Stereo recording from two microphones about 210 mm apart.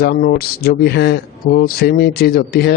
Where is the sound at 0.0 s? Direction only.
50° left (ahead or behind).